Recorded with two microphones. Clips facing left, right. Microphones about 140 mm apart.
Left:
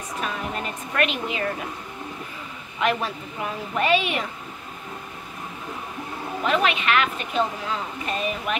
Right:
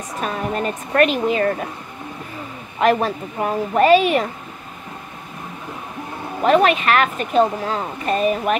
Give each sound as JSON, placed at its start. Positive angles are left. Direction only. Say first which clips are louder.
{"t": 0.2, "sound": "a woman's voice", "louder": "right 7 dB", "side_deg": -40}
{"t": 2.8, "sound": "speech", "louder": "right 7 dB", "side_deg": -45}
{"t": 6.4, "sound": "speech", "louder": "right 8 dB", "side_deg": -45}